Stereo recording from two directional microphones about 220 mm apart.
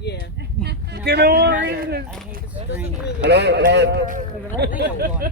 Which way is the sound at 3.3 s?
50° right (ahead or behind).